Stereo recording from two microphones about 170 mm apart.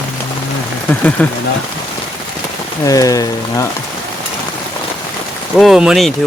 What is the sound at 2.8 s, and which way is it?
Speech, 20° left (ahead or behind).